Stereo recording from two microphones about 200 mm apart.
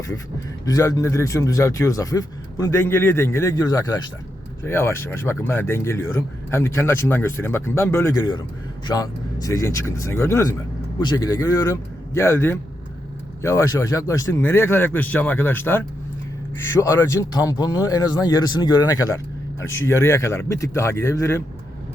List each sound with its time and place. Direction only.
0.6 s a man's voice: 15° left (ahead or behind)